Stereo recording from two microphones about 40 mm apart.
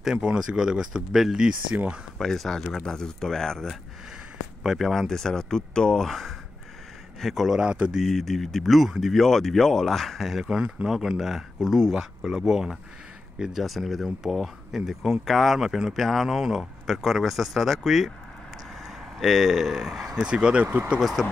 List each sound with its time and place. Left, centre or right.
0.0 s speech: centre
2.1 s speech: centre
4.6 s speech: centre
6.0 s speech: centre
19.1 s speech: centre
20.2 s speech: right
20.6 s speech: right
21.0 s speech: centre